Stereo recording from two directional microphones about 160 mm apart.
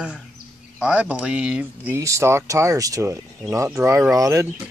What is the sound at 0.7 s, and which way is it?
Speech, 5° right (ahead or behind).